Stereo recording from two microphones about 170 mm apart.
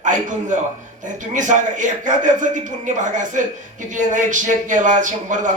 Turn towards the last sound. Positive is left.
turn(degrees=-50)  # may be behind; listen again after turning